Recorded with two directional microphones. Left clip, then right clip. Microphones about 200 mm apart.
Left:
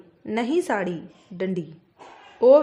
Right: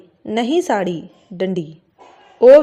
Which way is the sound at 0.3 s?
20° right (ahead or behind).